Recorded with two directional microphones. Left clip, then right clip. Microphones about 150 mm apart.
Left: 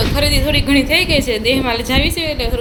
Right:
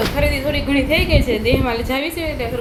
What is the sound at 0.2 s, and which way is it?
A woman's voice, 20° left (ahead or behind).